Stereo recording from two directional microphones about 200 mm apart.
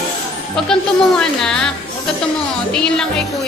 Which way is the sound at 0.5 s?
Centre (ahead or behind).